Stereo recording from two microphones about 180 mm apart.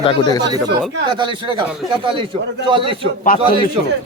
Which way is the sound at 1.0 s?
25° right (ahead or behind).